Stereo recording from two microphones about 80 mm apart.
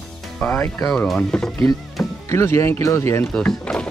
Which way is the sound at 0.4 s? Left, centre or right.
Centre.